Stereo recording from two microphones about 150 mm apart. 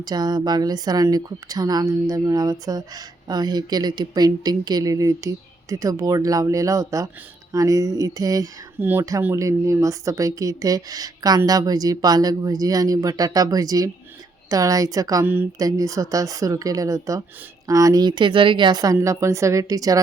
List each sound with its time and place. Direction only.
0.0 s speech: 25° right (ahead or behind)